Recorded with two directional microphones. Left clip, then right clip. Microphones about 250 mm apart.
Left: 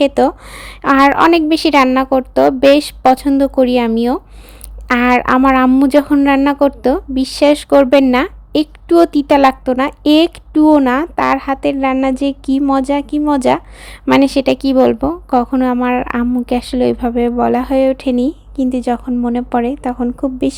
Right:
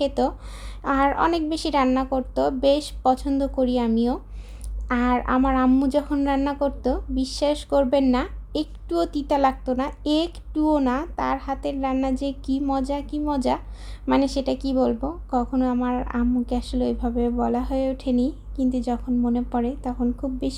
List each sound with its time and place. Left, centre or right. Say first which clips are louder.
0.0 s a woman's voice: left 11 dB; left